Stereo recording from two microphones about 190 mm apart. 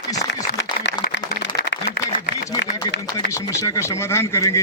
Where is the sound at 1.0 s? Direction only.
60° left (ahead or behind).